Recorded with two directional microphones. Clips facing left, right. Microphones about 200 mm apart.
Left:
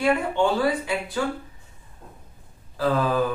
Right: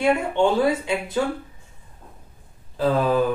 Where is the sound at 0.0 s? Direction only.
25° right (ahead or behind).